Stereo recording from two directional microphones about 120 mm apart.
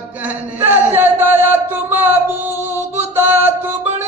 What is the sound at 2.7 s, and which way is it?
Music, 20° right (ahead or behind).